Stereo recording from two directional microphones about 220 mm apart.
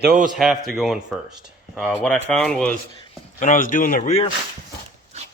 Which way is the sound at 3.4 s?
35° left (ahead or behind).